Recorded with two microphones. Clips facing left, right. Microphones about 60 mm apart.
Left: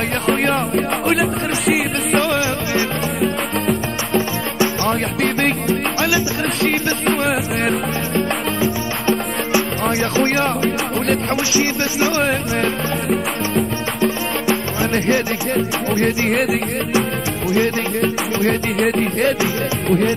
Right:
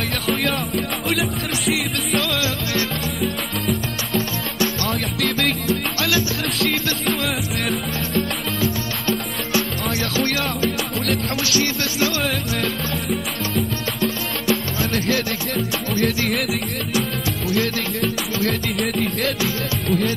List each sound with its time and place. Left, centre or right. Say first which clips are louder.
2.1 s music: left 5 dB; centre
5.9 s music: left 3 dB; centre
14.8 s music: left 4 dB; centre
17.6 s music: left 6 dB; centre
19.9 s music: left 4 dB; centre